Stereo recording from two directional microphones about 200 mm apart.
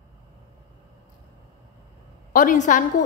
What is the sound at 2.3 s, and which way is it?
Speech, 40° left (ahead or behind).